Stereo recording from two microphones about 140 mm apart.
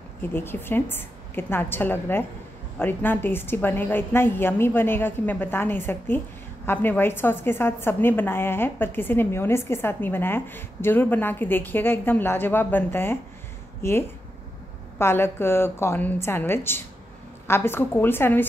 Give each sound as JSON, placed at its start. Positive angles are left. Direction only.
{"t": 0.3, "sound": "a woman's voice", "side_deg": 15}